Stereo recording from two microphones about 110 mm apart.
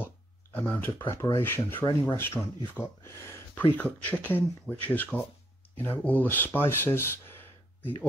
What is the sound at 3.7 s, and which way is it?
Speech, 15° left (ahead or behind).